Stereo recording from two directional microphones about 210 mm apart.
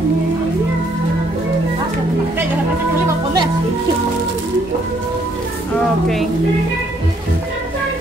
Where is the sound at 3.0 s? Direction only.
20° right (ahead or behind).